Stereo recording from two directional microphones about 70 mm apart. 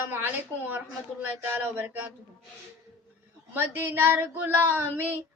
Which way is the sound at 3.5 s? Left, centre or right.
Right.